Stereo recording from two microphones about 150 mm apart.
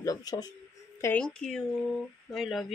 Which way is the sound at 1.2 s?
5° left (ahead or behind).